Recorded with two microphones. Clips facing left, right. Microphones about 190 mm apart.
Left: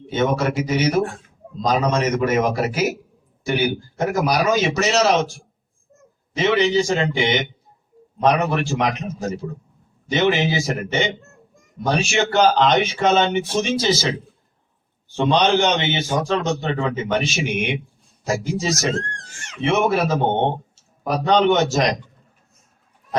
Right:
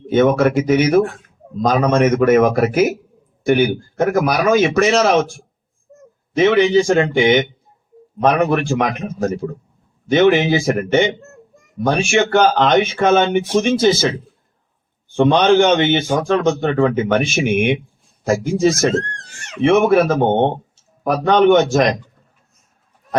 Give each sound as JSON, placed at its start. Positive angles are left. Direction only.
{"t": 0.1, "sound": "a man's voice", "side_deg": -55}
{"t": 15.1, "sound": "a man's voice", "side_deg": -55}